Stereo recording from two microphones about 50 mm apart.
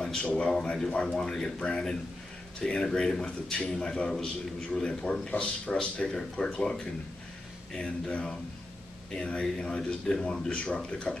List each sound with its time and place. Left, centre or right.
0.4 s a man's voice: centre